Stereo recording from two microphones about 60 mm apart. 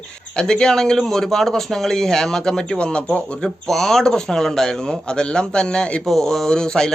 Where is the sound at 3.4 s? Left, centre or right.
Centre.